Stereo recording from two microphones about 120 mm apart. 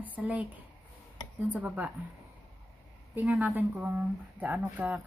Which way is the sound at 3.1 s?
15° right (ahead or behind).